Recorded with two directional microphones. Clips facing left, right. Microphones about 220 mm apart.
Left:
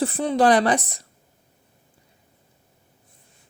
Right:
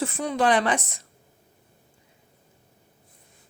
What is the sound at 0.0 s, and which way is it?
Speech, 35° left (ahead or behind).